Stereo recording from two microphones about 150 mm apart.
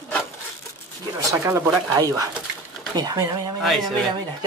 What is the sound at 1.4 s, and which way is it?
Speech, 20° right (ahead or behind).